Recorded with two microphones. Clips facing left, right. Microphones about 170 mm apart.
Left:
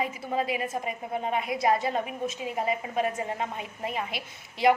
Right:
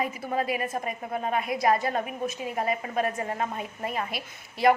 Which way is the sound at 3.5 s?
45° right (ahead or behind).